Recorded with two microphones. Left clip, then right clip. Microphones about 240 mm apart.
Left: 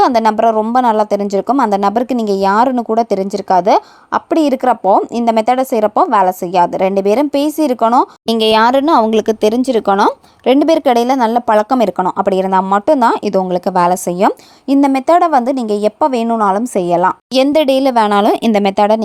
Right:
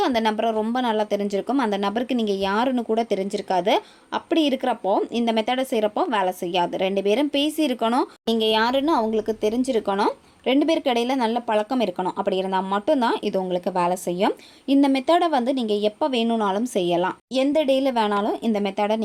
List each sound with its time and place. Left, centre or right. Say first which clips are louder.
0.0 s a woman's voice: left 11 dB; left
8.3 s speech: left 9 dB; left